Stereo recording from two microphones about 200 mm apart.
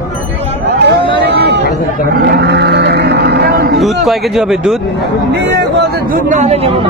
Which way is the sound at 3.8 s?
Centre (ahead or behind).